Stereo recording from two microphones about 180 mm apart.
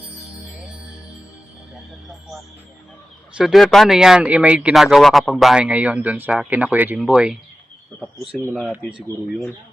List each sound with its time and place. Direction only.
3.3 s speech: centre (ahead or behind)